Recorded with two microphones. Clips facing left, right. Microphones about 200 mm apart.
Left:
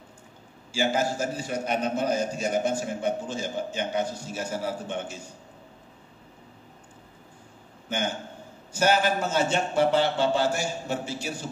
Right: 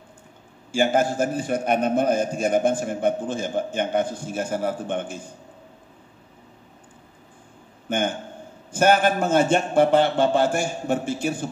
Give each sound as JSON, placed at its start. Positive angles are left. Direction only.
{"t": 0.7, "sound": "a man's voice", "side_deg": -55}
{"t": 7.9, "sound": "a man's voice", "side_deg": -55}